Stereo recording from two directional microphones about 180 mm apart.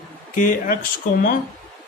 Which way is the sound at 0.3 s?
50° left (ahead or behind).